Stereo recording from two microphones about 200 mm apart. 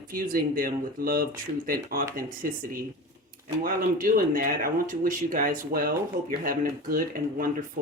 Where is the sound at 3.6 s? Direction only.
45° right (ahead or behind).